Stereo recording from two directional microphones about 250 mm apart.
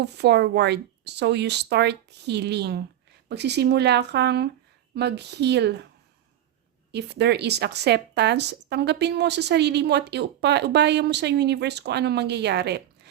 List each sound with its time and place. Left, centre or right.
0.0 s a woman's voice: right
6.9 s a woman's voice: right